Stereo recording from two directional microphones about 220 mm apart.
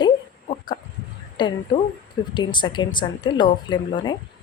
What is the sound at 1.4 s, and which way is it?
A woman's voice, 20° left (ahead or behind).